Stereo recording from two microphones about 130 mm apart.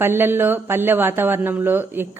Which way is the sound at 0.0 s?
15° right (ahead or behind).